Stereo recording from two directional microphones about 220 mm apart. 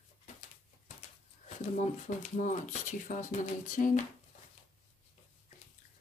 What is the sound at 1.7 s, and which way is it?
Speech, 35° left (ahead or behind).